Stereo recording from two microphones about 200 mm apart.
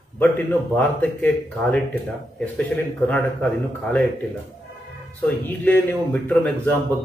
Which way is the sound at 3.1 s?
10° left (ahead or behind).